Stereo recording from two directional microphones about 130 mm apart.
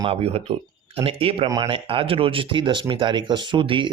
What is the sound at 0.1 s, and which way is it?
Speech, 50° right (ahead or behind).